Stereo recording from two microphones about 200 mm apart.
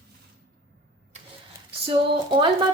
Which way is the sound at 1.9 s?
25° right (ahead or behind).